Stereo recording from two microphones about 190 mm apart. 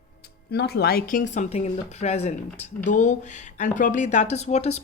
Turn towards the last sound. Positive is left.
turn(degrees=35)  # may be behind; listen again after turning